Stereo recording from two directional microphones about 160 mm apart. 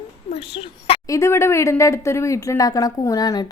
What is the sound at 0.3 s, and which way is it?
Speech, 40° left (ahead or behind).